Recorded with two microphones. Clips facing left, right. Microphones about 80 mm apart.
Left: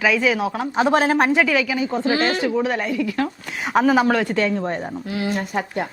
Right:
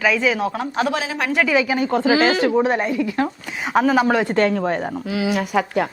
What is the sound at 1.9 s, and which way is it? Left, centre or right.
Speech, right.